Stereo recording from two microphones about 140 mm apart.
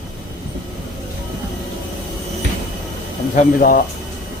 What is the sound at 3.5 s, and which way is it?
Speech, 90° left.